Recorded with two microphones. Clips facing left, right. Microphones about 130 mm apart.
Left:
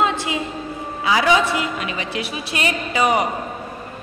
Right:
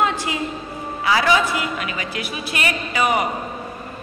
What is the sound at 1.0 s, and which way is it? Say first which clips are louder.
A man's voice: left 1 dB; 20° left (ahead or behind).